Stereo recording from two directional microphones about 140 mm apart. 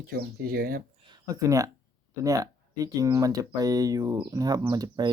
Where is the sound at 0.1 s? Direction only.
90° right.